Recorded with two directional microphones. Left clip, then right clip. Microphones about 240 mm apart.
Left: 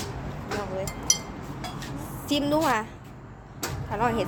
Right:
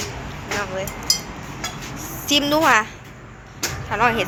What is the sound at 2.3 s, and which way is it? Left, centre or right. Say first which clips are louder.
Speech: right 8 dB; centre.